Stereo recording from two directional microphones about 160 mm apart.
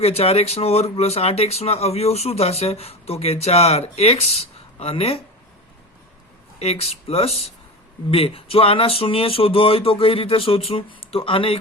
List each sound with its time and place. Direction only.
0.0 s speech: 40° left (ahead or behind)
6.6 s speech: 40° left (ahead or behind)